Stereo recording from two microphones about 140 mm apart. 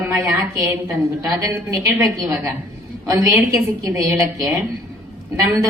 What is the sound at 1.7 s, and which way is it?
A woman's voice, 25° right (ahead or behind).